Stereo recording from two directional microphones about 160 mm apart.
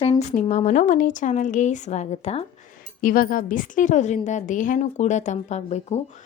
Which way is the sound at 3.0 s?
60° left (ahead or behind).